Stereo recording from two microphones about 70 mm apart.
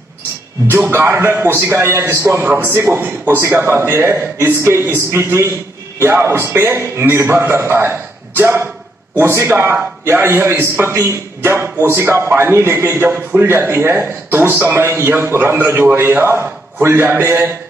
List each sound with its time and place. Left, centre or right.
0.7 s a man's voice: right